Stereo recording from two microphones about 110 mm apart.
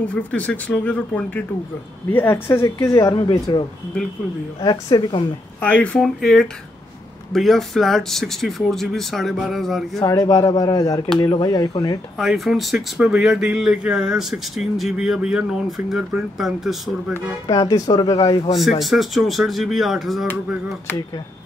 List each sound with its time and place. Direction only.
0.0 s speech: 10° left (ahead or behind); by 3.2 s 30° left (ahead or behind)
3.5 s speech: 40° left (ahead or behind)
5.6 s speech: 15° left (ahead or behind)
5.9 s speech: 5° left (ahead or behind)
9.9 s speech: 35° left (ahead or behind)
12.2 s speech: centre (ahead or behind)
17.5 s speech: 35° left (ahead or behind)
18.8 s speech: centre (ahead or behind)